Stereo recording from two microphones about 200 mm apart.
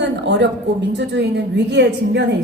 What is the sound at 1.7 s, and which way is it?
Speech, 55° right (ahead or behind).